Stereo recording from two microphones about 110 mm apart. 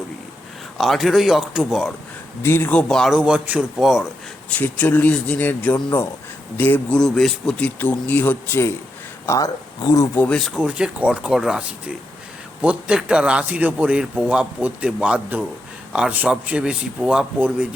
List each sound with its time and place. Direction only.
0.8 s a man's voice: centre (ahead or behind)
2.4 s speech: 20° left (ahead or behind)
3.1 s speech: 10° right (ahead or behind)
3.8 s a man's voice: 5° right (ahead or behind)
4.4 s speech: 15° left (ahead or behind)
7.0 s a man's voice: 5° left (ahead or behind)
7.8 s speech: 15° left (ahead or behind)
9.2 s speech: 30° left (ahead or behind)
10.2 s speech: 5° left (ahead or behind)
10.5 s speech: 10° right (ahead or behind)